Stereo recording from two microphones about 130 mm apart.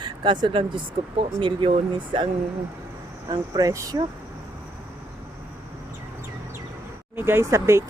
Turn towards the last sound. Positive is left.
turn(degrees=-20)  # may be behind; listen again after turning